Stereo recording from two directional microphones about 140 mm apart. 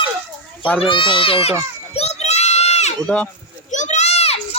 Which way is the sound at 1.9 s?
50° left (ahead or behind).